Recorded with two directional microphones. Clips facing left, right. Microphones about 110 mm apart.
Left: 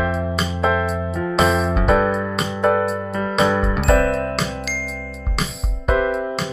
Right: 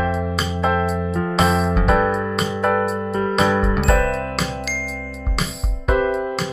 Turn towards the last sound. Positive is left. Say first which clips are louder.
# even
turn(degrees=0)  # may be behind; listen again after turning